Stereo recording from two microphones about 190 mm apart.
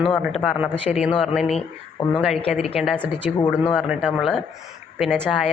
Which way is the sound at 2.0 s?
25° left (ahead or behind).